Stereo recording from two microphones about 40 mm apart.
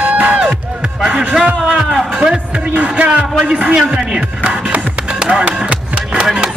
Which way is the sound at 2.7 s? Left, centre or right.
Right.